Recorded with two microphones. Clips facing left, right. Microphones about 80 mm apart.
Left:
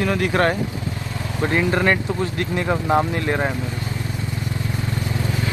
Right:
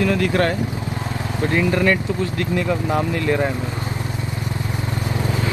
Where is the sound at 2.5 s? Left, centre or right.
Left.